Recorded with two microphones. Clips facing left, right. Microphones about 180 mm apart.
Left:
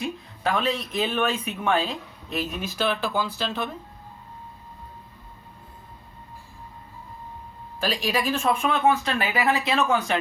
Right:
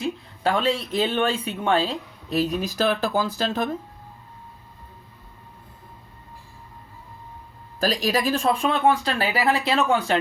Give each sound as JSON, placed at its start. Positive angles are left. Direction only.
{"t": 0.4, "sound": "speech", "side_deg": -30}
{"t": 7.8, "sound": "speech", "side_deg": -40}